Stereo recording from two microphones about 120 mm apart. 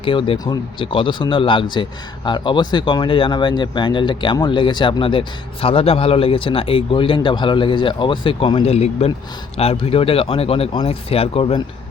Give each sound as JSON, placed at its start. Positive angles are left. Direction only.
{"t": 0.0, "sound": "a man's voice", "side_deg": 45}
{"t": 0.3, "sound": "speech", "side_deg": 35}
{"t": 0.8, "sound": "a man's voice", "side_deg": 45}
{"t": 8.6, "sound": "a man's voice", "side_deg": 60}